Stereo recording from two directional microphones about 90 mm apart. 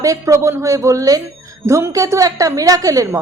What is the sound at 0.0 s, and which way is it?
A woman's voice, 35° right (ahead or behind).